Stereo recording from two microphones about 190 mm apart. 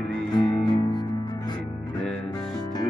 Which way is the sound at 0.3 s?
20° left (ahead or behind).